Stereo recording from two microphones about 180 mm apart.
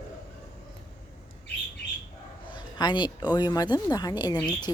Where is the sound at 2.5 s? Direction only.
25° left (ahead or behind).